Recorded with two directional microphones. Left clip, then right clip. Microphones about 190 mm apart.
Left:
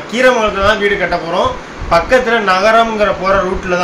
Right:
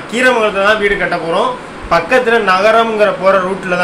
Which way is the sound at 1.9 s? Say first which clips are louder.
Even; 10° right (ahead or behind).